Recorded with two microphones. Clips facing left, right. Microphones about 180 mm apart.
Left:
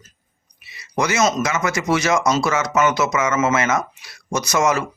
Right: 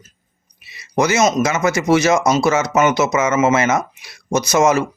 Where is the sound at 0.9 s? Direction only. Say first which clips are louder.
Right 4 dB; 25° right (ahead or behind).